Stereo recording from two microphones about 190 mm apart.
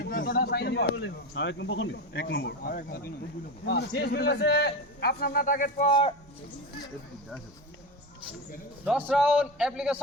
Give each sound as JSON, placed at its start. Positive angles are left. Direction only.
{"t": 0.0, "sound": "a man's voice", "side_deg": 50}
{"t": 2.1, "sound": "a man's voice", "side_deg": 65}
{"t": 8.8, "sound": "a man's voice", "side_deg": -5}